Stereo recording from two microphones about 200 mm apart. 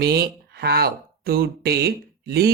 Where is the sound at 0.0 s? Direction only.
50° right (ahead or behind).